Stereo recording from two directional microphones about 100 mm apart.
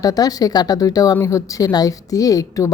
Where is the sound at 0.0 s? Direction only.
40° left (ahead or behind).